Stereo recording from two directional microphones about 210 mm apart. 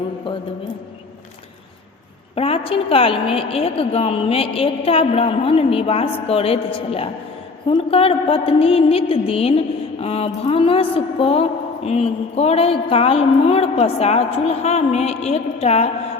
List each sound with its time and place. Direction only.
0.3 s a woman's voice: 25° left (ahead or behind)
2.3 s a woman's voice: 25° left (ahead or behind)